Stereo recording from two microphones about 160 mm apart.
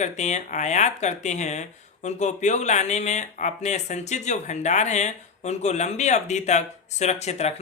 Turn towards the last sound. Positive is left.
turn(degrees=45)  # may be behind; listen again after turning